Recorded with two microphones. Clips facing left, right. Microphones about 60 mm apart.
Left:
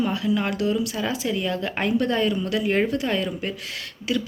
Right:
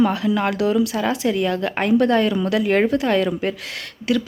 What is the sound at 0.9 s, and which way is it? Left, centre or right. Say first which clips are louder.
A woman's voice: right 5 dB; right.